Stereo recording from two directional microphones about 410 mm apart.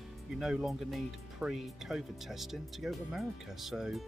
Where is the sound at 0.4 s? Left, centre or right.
Centre.